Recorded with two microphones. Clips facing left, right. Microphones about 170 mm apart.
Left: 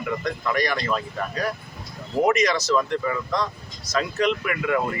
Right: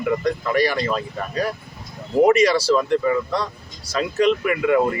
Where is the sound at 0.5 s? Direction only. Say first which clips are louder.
Right 6 dB; 30° right (ahead or behind).